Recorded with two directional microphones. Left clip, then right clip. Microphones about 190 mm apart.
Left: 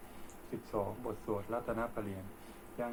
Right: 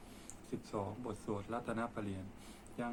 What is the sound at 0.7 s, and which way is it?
A man's voice, centre (ahead or behind).